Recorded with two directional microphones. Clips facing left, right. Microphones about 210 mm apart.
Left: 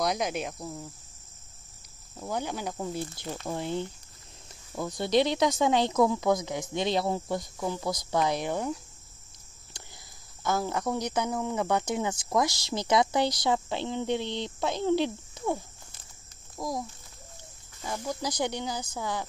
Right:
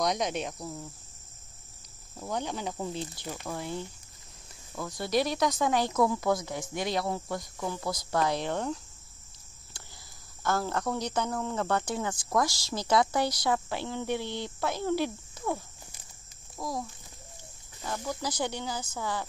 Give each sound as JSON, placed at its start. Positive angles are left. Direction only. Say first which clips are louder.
{"t": 0.0, "sound": "speech", "louder": "even", "side_deg": 5}
{"t": 2.1, "sound": "speech", "louder": "left 1 dB", "side_deg": 5}
{"t": 3.0, "sound": "speech", "louder": "left 2 dB", "side_deg": -15}
{"t": 3.4, "sound": "speech", "louder": "left 5 dB", "side_deg": 25}
{"t": 7.5, "sound": "speech", "louder": "left 2 dB", "side_deg": 15}
{"t": 10.4, "sound": "a child's voice", "louder": "left 1 dB", "side_deg": 15}
{"t": 17.8, "sound": "speech", "louder": "left 1 dB", "side_deg": 15}